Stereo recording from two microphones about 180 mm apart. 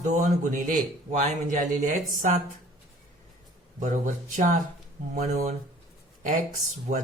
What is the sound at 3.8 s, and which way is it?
Speech, 45° right (ahead or behind).